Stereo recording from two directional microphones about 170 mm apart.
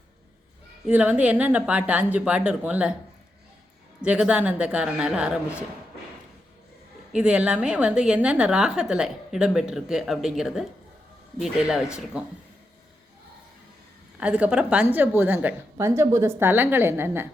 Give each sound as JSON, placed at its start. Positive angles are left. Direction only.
{"t": 0.9, "sound": "a woman's voice", "side_deg": -10}
{"t": 4.0, "sound": "a woman's voice", "side_deg": -5}
{"t": 7.1, "sound": "a woman's voice", "side_deg": -5}
{"t": 14.2, "sound": "a woman's voice", "side_deg": -5}